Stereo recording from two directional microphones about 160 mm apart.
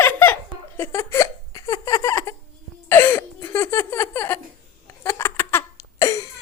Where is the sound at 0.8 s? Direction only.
15° left (ahead or behind).